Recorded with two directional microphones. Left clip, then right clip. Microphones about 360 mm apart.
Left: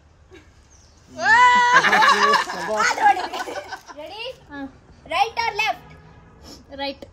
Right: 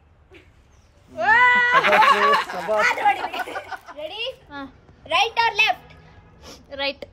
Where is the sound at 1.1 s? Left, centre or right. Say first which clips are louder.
Left 2 dB; right.